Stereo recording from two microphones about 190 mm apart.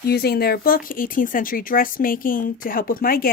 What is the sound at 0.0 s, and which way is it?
Speech, 55° left (ahead or behind).